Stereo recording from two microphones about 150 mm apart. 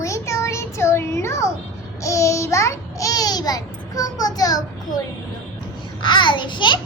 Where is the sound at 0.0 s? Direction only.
20° left (ahead or behind).